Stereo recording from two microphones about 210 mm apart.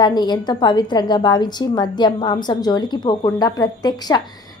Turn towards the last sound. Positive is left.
turn(degrees=20)  # may be behind; listen again after turning